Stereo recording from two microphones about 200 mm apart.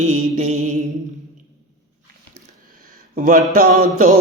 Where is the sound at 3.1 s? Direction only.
45° right (ahead or behind).